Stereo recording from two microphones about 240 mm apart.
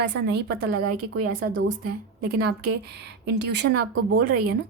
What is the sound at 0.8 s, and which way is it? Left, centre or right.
Speech, right.